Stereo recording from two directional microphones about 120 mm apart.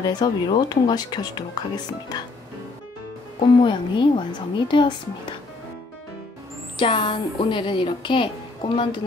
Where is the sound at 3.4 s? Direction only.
45° left (ahead or behind).